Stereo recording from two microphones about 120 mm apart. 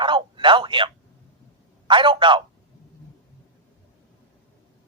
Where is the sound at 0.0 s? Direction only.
45° right (ahead or behind).